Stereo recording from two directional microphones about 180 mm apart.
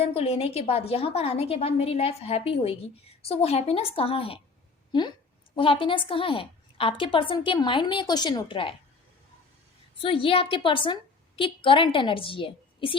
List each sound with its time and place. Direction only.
0.0 s a woman's voice: 35° left (ahead or behind)
10.0 s a woman's voice: 30° left (ahead or behind)